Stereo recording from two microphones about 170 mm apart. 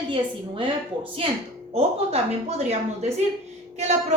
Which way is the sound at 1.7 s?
35° right (ahead or behind).